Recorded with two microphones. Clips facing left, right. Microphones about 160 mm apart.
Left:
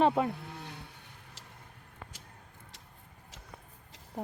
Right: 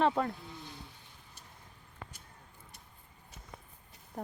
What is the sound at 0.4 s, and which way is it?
Livestock, 70° left (ahead or behind).